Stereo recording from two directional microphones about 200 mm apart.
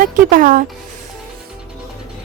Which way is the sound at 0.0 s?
40° right (ahead or behind).